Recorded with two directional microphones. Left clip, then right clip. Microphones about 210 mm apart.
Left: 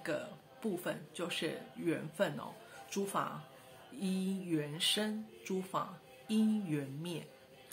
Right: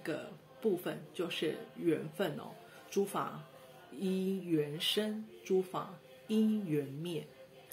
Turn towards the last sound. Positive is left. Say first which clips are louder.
# right 3 dB
turn(degrees=15)  # may be behind; listen again after turning